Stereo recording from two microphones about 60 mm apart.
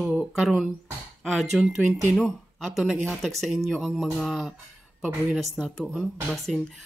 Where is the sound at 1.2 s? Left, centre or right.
Centre.